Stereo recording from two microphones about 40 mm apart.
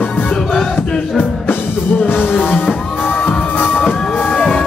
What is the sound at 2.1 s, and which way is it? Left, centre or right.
Music, left.